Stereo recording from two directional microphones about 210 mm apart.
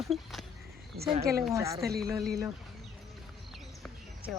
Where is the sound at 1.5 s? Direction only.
15° right (ahead or behind).